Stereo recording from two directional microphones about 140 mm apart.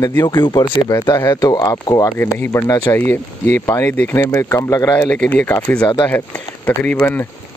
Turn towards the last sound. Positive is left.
turn(degrees=15)  # may be behind; listen again after turning